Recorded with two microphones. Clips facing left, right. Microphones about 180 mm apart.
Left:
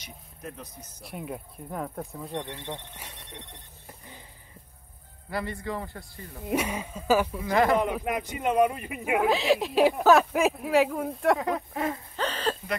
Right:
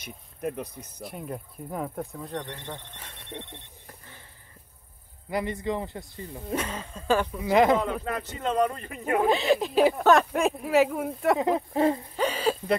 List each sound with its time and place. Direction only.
0.0 s speech: 60° right (ahead or behind)
1.0 s speech: centre (ahead or behind)
3.8 s vehicle: 15° left (ahead or behind)
5.3 s speech: 20° right (ahead or behind)
6.5 s speech: 10° left (ahead or behind)
7.4 s speech: 20° right (ahead or behind)
7.7 s speech: 15° left (ahead or behind); by 11.3 s centre (ahead or behind)
11.3 s speech: 25° right (ahead or behind)
12.2 s a sound: 10° right (ahead or behind)